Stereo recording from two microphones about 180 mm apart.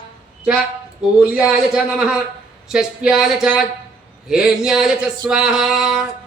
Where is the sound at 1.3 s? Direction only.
5° right (ahead or behind).